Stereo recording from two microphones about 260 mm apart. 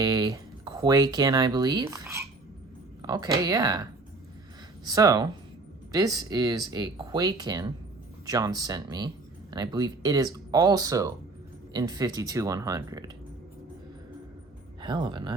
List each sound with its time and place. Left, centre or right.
0.0 s speech: centre
4.9 s speech: centre
14.8 s speech: centre